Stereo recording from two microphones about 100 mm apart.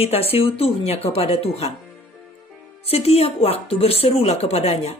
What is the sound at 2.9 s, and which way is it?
Speech, 90° left.